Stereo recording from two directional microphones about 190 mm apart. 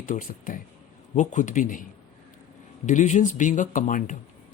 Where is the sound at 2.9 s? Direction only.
40° left (ahead or behind).